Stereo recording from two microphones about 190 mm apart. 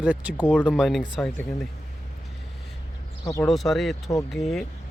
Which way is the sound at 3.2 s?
15° left (ahead or behind).